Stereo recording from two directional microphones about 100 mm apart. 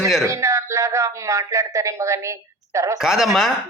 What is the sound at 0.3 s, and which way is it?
Speech, 30° right (ahead or behind).